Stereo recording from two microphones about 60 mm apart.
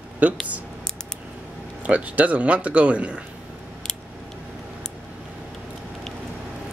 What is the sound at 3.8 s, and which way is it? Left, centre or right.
Scissors, centre.